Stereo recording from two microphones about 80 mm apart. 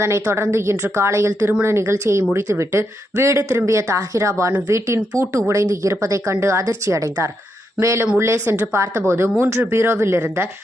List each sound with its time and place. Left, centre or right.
0.0 s speech: right